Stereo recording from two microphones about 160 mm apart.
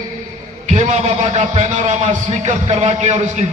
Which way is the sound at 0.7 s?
45° right (ahead or behind).